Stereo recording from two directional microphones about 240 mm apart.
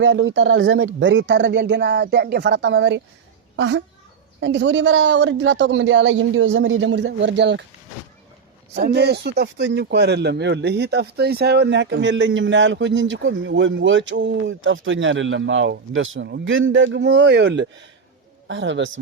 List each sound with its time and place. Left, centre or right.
0.0 s speech: right
8.7 s speech: right